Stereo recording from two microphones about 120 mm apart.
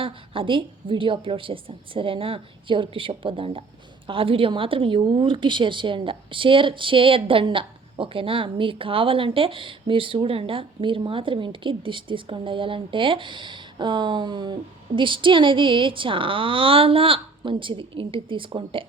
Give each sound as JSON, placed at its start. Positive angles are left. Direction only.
{"t": 0.0, "sound": "a woman's voice", "side_deg": -45}